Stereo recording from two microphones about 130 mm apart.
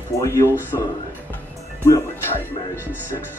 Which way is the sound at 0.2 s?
20° left (ahead or behind).